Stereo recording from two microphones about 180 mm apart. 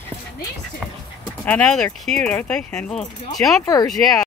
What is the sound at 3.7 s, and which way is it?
Speech, 20° left (ahead or behind).